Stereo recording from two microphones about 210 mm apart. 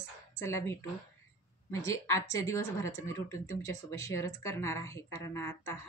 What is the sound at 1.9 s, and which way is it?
Speech, 15° left (ahead or behind).